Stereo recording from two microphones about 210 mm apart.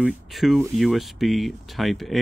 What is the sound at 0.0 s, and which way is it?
Speech, centre (ahead or behind).